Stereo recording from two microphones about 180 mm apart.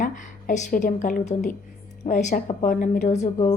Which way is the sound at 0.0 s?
45° left (ahead or behind).